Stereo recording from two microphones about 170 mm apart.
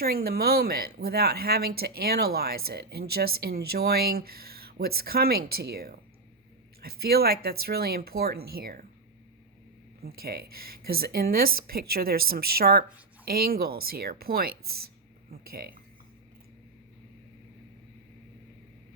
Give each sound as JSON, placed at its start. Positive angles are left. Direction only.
{"t": 0.0, "sound": "speech", "side_deg": -65}
{"t": 10.0, "sound": "speech", "side_deg": -65}